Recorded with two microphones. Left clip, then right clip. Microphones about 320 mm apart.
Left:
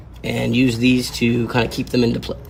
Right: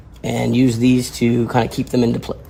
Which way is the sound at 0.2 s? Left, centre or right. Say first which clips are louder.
Right 1 dB; right.